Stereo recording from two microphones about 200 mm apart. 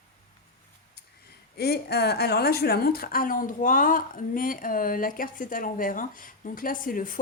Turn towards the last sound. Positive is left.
turn(degrees=45)  # may be behind; listen again after turning